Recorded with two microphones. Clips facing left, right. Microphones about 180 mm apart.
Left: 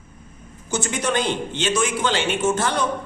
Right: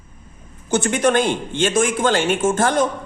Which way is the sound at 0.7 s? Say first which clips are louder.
Right 6 dB; 55° right (ahead or behind).